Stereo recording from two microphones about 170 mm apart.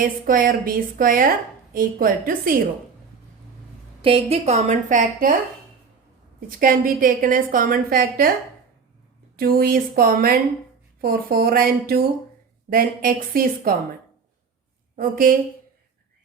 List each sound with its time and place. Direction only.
0.0 s a woman's voice: 55° right (ahead or behind)
4.0 s a woman's voice: 35° right (ahead or behind)
6.5 s a woman's voice: 55° right (ahead or behind)
9.3 s a woman's voice: 60° right (ahead or behind)
14.9 s a woman's voice: 55° right (ahead or behind)